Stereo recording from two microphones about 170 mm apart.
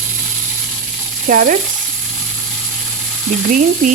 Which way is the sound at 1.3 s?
55° right (ahead or behind).